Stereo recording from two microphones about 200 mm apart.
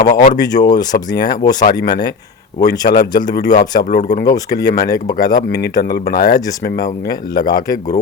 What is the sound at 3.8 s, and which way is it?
Speech, 50° left (ahead or behind).